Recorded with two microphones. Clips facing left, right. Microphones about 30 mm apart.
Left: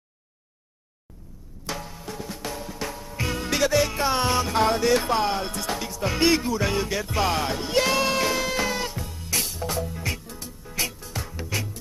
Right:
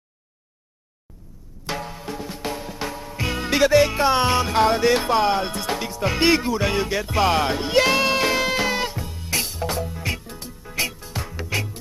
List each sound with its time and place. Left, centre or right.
1.7 s music: right
2.1 s drum: centre
3.2 s music: right
10.2 s music: right